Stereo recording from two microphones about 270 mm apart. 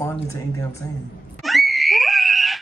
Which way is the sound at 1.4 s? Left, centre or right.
Centre.